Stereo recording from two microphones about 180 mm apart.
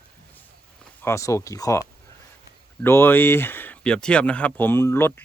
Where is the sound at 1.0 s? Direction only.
15° left (ahead or behind).